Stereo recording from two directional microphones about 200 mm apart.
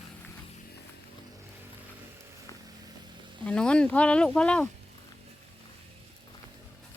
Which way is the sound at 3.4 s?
5° left (ahead or behind).